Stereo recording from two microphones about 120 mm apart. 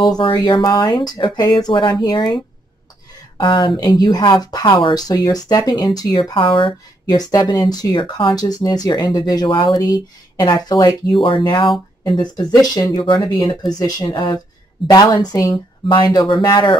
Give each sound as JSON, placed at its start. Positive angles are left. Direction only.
{"t": 0.4, "sound": "speech", "side_deg": 40}
{"t": 3.7, "sound": "speech", "side_deg": 30}
{"t": 6.3, "sound": "speech", "side_deg": 45}
{"t": 13.0, "sound": "speech", "side_deg": 45}